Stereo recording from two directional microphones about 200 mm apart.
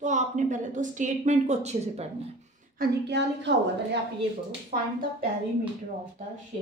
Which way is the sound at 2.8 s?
60° right (ahead or behind).